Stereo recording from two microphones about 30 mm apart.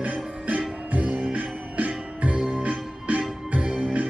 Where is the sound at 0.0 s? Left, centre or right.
Right.